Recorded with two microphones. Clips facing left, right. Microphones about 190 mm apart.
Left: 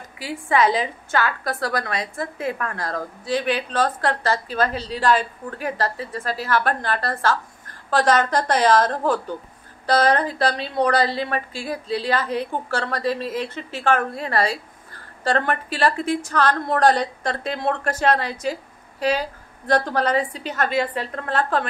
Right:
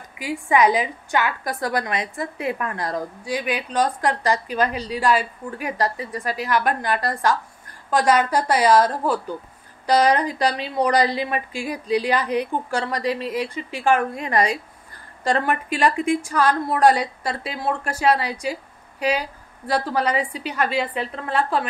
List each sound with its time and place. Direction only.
0.2 s a woman's voice: 15° right (ahead or behind)